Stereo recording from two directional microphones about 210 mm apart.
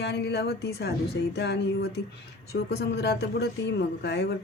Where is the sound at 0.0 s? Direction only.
50° left (ahead or behind).